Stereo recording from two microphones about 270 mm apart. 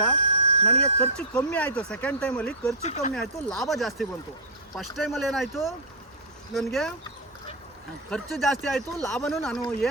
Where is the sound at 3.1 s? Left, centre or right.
Centre.